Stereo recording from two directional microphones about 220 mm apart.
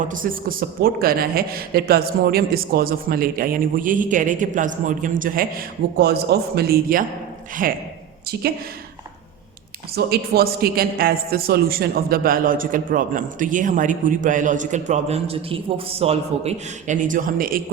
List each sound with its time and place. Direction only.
0.1 s a man's voice: 40° right (ahead or behind)
9.9 s a man's voice: 45° right (ahead or behind)